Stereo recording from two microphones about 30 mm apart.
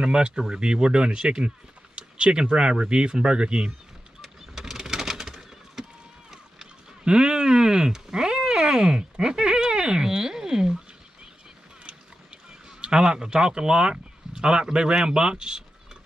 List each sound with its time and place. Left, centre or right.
0.0 s speech: right
4.2 s vehicle: centre
4.7 s a sound: centre
7.1 s speech: right
12.6 s speech: right